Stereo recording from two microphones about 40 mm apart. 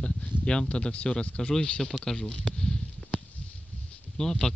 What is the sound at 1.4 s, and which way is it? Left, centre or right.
Speech, centre.